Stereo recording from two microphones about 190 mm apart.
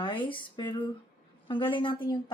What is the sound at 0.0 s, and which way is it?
A woman's voice, 25° left (ahead or behind).